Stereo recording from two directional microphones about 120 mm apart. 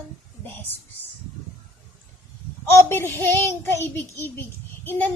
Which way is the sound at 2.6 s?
20° left (ahead or behind).